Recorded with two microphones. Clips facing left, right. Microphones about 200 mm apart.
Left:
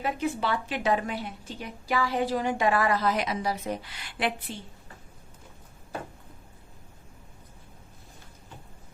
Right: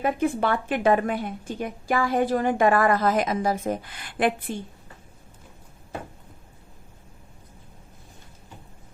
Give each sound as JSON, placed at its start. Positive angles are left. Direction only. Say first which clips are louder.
{"t": 0.0, "sound": "a woman's voice", "louder": "right 5 dB", "side_deg": -50}